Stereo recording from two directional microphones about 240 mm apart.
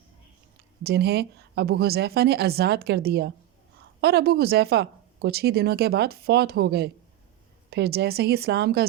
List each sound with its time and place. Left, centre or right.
0.8 s speech: right